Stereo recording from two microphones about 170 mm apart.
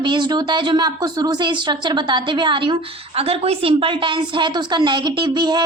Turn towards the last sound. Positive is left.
turn(degrees=-25)  # may be behind; listen again after turning